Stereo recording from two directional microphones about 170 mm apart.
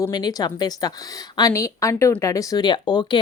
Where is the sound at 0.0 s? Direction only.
25° left (ahead or behind).